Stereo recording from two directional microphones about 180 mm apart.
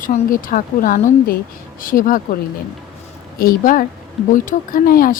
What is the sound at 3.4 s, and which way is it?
A woman's voice, 50° left (ahead or behind).